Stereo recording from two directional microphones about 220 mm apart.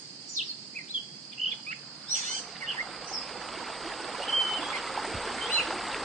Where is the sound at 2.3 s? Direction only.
Centre (ahead or behind).